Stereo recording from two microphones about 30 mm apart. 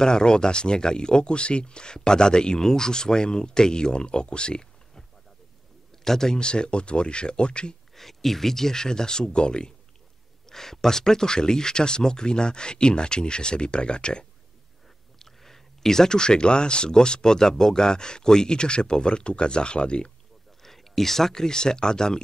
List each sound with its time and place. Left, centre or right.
0.0 s speech: left
6.0 s speech: centre
6.3 s speech: left
7.9 s speech: centre; by 9.8 s left
10.5 s speech: centre; by 14.2 s left
15.1 s speech: centre; by 20.1 s left
20.6 s speech: centre